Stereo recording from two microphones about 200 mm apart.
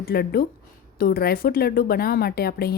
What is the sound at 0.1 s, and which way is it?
A woman's voice, 50° left (ahead or behind).